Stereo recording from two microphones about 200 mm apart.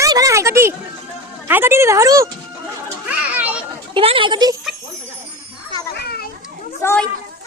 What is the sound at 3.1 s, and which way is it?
Children playing, 5° right (ahead or behind).